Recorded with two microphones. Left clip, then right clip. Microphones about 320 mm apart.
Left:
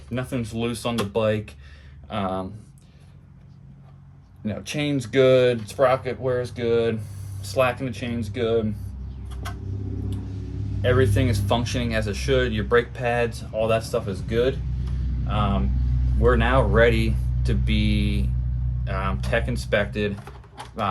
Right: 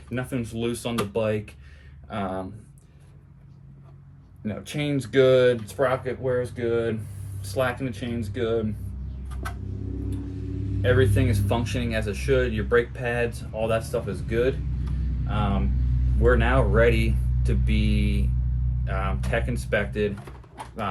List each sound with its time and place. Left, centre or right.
0.1 s speech: centre
4.4 s speech: centre
11.1 s speech: centre